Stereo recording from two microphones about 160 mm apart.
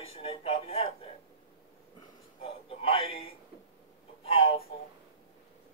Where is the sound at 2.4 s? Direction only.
35° left (ahead or behind).